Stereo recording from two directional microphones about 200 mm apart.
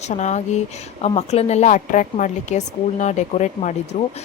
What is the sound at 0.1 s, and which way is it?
Speech, 35° left (ahead or behind).